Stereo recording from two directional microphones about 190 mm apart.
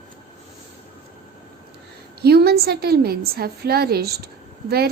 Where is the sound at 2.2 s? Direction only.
60° right (ahead or behind).